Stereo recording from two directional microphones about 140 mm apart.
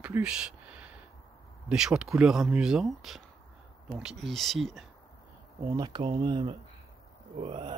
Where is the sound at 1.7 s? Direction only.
5° right (ahead or behind).